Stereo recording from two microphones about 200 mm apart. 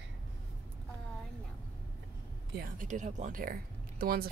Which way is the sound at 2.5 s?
45° right (ahead or behind).